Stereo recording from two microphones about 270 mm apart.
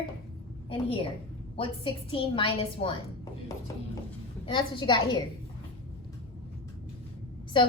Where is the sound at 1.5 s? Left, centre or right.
Centre.